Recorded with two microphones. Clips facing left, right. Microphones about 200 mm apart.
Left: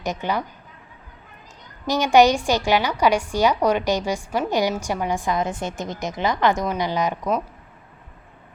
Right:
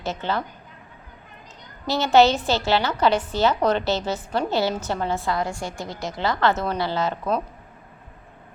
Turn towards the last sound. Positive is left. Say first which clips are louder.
# left 1 dB
turn(degrees=15)  # may be behind; listen again after turning